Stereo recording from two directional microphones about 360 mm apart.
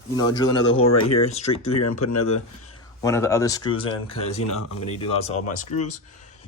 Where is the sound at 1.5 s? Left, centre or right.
Left.